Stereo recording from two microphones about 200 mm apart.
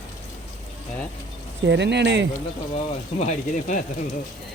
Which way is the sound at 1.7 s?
60° right (ahead or behind).